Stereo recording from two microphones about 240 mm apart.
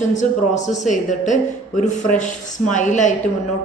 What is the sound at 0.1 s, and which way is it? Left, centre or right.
A man's voice, left.